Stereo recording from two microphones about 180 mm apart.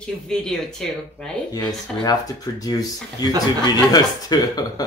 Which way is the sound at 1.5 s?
20° left (ahead or behind).